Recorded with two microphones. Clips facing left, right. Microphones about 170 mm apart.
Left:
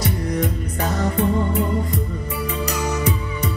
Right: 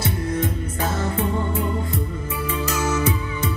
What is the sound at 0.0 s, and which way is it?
Music, 15° left (ahead or behind).